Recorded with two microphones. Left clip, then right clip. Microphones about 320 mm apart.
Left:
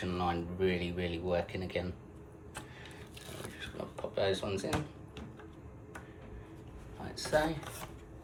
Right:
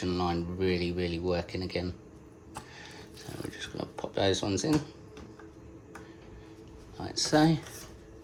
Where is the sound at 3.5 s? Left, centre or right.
Right.